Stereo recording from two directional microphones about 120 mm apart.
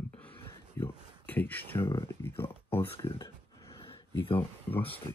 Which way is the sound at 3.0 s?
35° left (ahead or behind).